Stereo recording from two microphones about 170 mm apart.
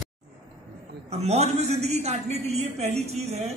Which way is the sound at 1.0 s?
40° right (ahead or behind).